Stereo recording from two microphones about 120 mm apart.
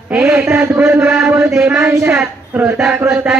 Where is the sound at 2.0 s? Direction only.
10° right (ahead or behind).